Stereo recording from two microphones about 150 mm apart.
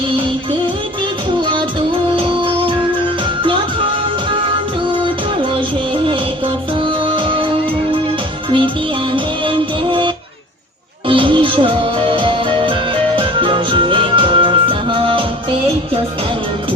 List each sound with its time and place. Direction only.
2.1 s music: 35° right (ahead or behind)
8.4 s music: 35° right (ahead or behind)
11.1 s music: 35° right (ahead or behind)